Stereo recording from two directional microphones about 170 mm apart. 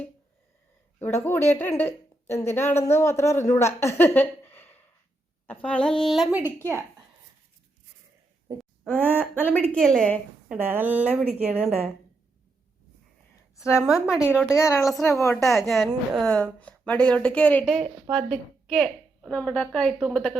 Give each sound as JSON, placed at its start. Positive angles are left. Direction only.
{"t": 0.9, "sound": "a woman's voice", "side_deg": 10}
{"t": 8.8, "sound": "a woman's voice", "side_deg": 10}
{"t": 10.6, "sound": "a woman's voice", "side_deg": -10}
{"t": 13.7, "sound": "a woman's voice", "side_deg": 0}
{"t": 15.2, "sound": "a woman's voice", "side_deg": 15}
{"t": 15.4, "sound": "a woman's voice", "side_deg": 0}